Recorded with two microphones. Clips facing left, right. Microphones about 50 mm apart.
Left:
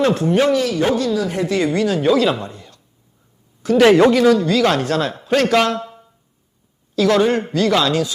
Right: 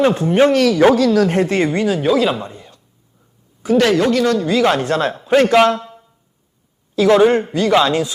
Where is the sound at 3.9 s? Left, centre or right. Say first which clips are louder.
Left 4 dB; left.